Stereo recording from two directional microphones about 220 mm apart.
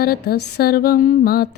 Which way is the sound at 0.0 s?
45° left (ahead or behind).